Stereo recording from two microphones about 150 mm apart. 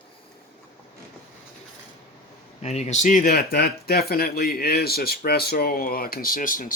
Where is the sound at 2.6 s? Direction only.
45° left (ahead or behind).